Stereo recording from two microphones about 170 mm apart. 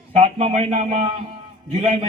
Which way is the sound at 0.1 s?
35° right (ahead or behind).